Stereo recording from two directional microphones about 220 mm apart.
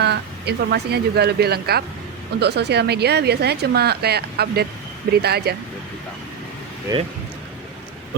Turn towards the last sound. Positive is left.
turn(degrees=-20)  # may be behind; listen again after turning